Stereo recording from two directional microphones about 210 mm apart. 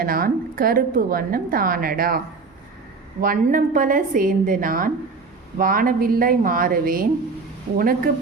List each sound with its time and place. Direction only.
0.0 s a woman's voice: 45° right (ahead or behind)